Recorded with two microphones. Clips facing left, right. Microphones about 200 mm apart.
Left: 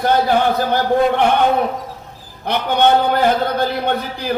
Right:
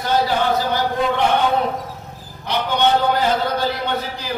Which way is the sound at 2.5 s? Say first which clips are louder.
Left 3 dB; 55° left (ahead or behind).